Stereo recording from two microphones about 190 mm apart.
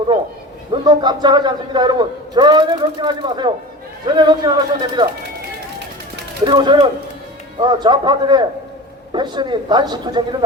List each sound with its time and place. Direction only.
0.7 s a man's voice: 20° right (ahead or behind)
6.4 s a man's voice: 25° right (ahead or behind)